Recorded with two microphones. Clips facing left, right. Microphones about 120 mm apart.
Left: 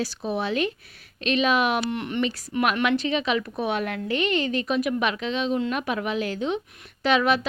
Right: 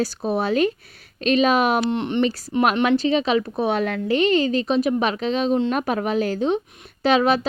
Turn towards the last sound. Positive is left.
turn(degrees=-35)  # may be behind; listen again after turning